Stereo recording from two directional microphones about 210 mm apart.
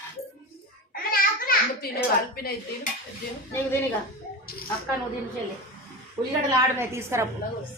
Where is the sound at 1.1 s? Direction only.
45° left (ahead or behind).